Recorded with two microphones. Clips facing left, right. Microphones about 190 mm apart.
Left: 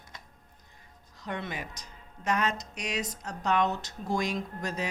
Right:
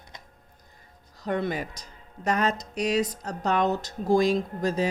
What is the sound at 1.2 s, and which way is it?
Speech, 40° right (ahead or behind).